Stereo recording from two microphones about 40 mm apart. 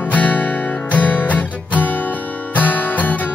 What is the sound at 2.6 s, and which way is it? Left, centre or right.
Guitar, left.